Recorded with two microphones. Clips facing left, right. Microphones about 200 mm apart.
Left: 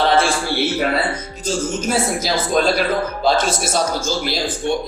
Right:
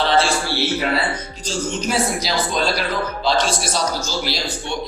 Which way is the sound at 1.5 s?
50° left (ahead or behind).